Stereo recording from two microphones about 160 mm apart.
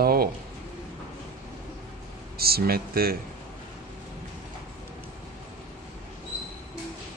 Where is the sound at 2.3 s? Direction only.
75° right (ahead or behind).